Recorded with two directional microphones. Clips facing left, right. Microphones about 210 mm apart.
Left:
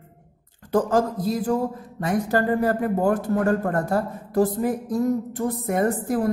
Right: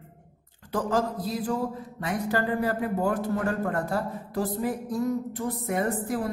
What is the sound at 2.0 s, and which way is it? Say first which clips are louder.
Speech: left 5 dB; 45° left (ahead or behind).